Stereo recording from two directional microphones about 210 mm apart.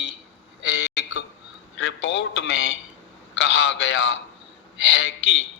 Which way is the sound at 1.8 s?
60° left (ahead or behind).